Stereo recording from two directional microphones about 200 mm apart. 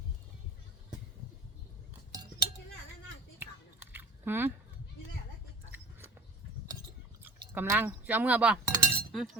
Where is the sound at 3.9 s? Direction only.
10° right (ahead or behind).